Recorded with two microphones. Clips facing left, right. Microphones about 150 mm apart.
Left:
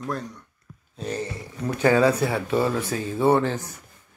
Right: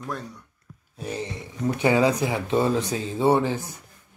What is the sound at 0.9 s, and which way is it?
Speech, 10° right (ahead or behind).